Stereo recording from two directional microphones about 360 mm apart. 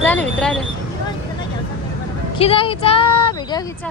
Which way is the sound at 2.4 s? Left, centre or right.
Centre.